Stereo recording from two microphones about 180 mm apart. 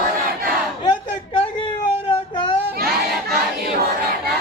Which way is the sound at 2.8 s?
60° right (ahead or behind).